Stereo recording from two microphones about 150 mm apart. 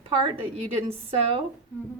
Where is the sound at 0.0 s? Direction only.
40° right (ahead or behind).